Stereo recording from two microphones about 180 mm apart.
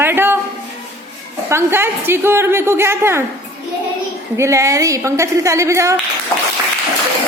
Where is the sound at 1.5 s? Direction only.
15° right (ahead or behind).